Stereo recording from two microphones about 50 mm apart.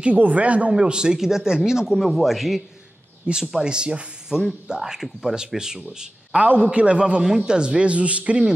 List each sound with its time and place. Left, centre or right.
0.0 s a man's voice: right; by 2.0 s centre
2.0 s speech: centre
3.3 s a man's voice: right
5.9 s a man's voice: right